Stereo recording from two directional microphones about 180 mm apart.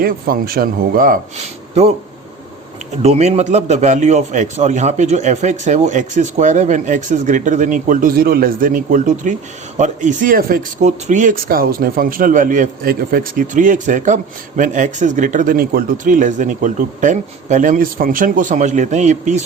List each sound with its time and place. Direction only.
0.0 s a man's voice: 55° right (ahead or behind)
2.9 s speech: 35° right (ahead or behind)